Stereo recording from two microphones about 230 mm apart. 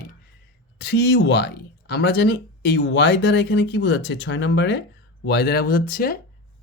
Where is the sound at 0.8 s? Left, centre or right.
Left.